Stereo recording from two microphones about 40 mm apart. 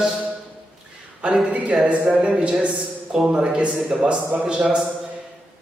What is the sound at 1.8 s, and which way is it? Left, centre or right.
A man's voice, right.